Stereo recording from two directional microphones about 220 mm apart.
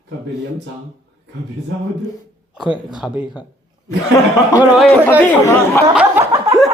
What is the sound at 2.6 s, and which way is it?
Speech, 5° right (ahead or behind).